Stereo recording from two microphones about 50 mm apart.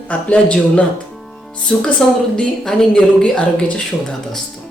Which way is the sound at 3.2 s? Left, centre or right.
Left.